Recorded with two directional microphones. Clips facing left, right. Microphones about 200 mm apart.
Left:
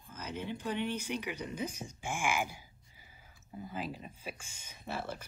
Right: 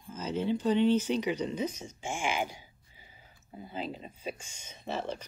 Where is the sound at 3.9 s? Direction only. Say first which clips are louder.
Right 5 dB; 25° right (ahead or behind).